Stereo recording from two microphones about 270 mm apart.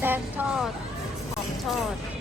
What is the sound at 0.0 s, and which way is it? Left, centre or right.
Vehicle, centre.